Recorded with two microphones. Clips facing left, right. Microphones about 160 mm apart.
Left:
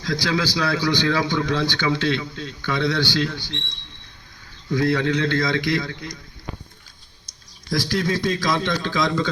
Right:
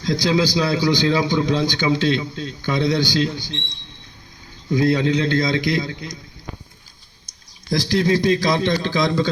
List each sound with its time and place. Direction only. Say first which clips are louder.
0.0 s a man's voice: right 4 dB; 20° right (ahead or behind)
4.7 s a man's voice: right 3 dB; 15° right (ahead or behind)
7.9 s a man's voice: right 7 dB; 35° right (ahead or behind)